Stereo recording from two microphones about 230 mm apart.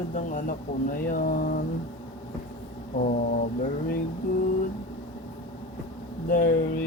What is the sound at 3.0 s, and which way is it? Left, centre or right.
Speech, left.